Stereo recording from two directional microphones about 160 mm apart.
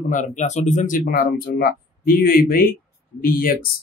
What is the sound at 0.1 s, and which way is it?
Speech, 50° left (ahead or behind).